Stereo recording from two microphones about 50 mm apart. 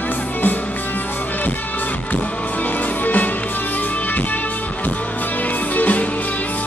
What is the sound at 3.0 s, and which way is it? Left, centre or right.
Music, left.